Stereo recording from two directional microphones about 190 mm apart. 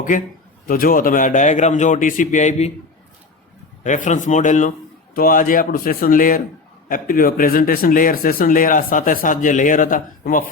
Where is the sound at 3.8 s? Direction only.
40° left (ahead or behind).